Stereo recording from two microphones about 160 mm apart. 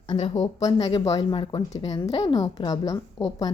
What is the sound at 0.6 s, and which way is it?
Speech, 25° left (ahead or behind).